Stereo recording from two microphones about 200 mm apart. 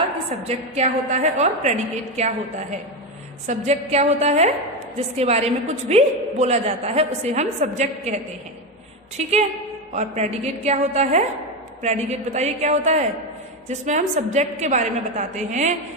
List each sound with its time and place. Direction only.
0.4 s a woman's voice: 35° right (ahead or behind)